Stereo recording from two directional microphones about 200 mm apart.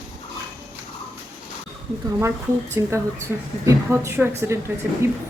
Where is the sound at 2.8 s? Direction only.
15° right (ahead or behind).